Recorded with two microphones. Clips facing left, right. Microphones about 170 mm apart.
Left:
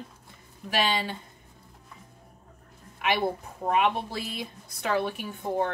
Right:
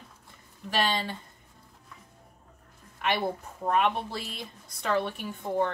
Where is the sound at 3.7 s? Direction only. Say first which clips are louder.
Left 1 dB; 5° left (ahead or behind).